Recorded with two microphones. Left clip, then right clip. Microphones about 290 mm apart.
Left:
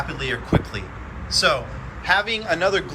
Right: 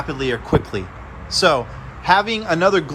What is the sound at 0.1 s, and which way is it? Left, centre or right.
A man's voice, centre.